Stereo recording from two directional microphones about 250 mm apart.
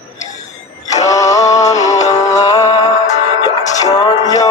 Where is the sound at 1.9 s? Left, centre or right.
Left.